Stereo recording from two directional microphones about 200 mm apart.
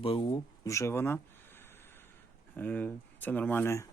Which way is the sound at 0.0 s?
25° left (ahead or behind).